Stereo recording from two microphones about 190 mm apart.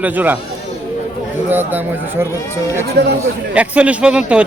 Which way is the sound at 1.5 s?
10° right (ahead or behind).